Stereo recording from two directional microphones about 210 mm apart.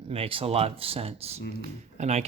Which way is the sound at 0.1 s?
25° right (ahead or behind).